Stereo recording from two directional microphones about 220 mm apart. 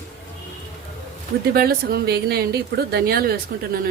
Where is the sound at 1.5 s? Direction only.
45° right (ahead or behind).